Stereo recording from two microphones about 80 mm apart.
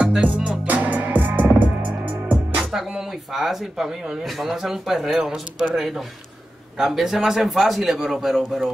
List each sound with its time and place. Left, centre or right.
0.0 s music: centre
2.6 s speech: centre